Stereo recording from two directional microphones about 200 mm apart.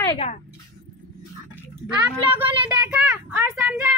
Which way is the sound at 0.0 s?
25° left (ahead or behind).